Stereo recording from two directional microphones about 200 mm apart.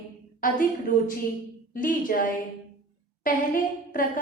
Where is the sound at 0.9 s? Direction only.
40° left (ahead or behind).